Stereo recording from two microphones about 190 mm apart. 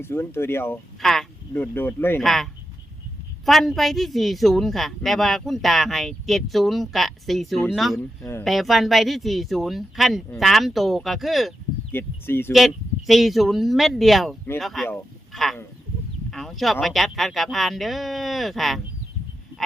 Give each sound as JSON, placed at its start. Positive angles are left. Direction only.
{"t": 0.0, "sound": "speech", "side_deg": 10}
{"t": 1.0, "sound": "speech", "side_deg": 0}
{"t": 7.9, "sound": "speech", "side_deg": 15}
{"t": 8.4, "sound": "speech", "side_deg": 0}
{"t": 11.9, "sound": "speech", "side_deg": 10}
{"t": 12.5, "sound": "speech", "side_deg": 0}
{"t": 16.3, "sound": "a sound", "side_deg": 0}
{"t": 16.8, "sound": "speech", "side_deg": 0}